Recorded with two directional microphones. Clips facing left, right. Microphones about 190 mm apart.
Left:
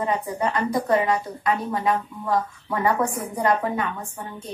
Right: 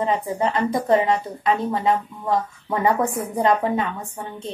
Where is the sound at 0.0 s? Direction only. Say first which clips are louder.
Right 2 dB; 25° right (ahead or behind).